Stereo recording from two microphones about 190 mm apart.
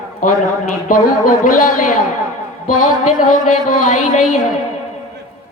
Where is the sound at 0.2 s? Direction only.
45° left (ahead or behind).